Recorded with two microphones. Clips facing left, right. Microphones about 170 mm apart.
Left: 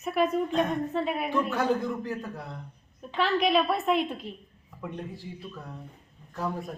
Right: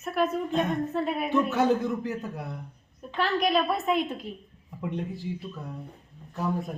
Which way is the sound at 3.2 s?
Centre (ahead or behind).